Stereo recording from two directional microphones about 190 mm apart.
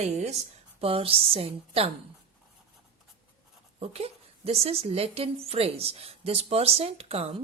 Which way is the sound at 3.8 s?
30° right (ahead or behind).